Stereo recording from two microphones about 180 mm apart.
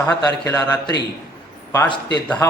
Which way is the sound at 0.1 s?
15° left (ahead or behind).